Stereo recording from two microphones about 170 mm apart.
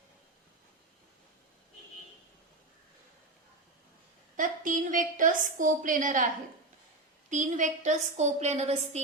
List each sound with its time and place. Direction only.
4.4 s a woman's voice: 50° right (ahead or behind)